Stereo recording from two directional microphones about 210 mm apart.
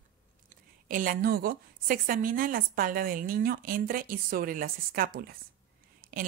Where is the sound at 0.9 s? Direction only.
40° right (ahead or behind).